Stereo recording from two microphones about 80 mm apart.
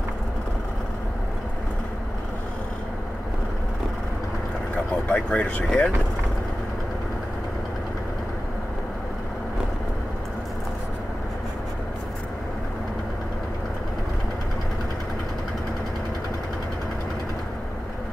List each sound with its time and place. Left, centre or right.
5.1 s speech: centre